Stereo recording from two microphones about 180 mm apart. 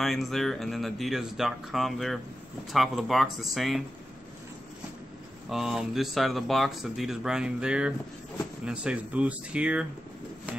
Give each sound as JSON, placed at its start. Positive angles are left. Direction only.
{"t": 0.0, "sound": "speech", "side_deg": 0}
{"t": 5.5, "sound": "speech", "side_deg": 0}